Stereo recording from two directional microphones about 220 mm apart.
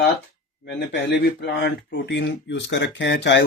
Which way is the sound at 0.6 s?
50° left (ahead or behind).